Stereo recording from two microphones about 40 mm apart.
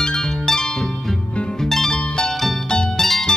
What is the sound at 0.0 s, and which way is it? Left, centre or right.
Music, centre.